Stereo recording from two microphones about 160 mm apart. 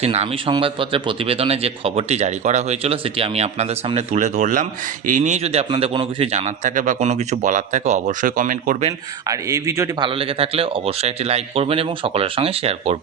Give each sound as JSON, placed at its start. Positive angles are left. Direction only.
{"t": 0.0, "sound": "a man's voice", "side_deg": -40}
{"t": 8.9, "sound": "speech", "side_deg": -20}
{"t": 10.0, "sound": "a man's voice", "side_deg": -35}